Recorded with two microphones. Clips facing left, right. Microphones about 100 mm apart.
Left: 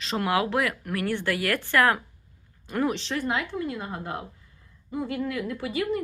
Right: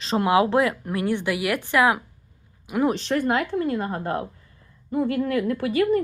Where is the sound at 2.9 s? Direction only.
50° right (ahead or behind).